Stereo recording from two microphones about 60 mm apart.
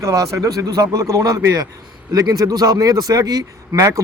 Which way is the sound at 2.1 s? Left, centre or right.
Right.